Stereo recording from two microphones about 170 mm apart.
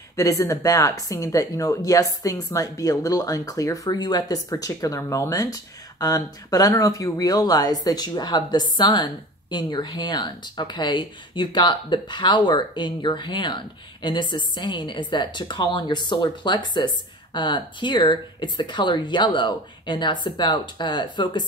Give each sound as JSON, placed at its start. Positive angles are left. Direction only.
{"t": 0.1, "sound": "speech", "side_deg": 20}